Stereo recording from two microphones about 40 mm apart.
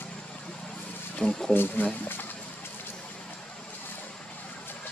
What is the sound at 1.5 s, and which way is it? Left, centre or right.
Speech, left.